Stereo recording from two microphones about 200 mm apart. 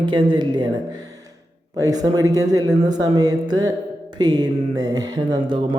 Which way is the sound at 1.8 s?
20° right (ahead or behind).